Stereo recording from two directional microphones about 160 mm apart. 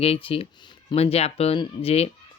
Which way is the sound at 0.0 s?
35° left (ahead or behind).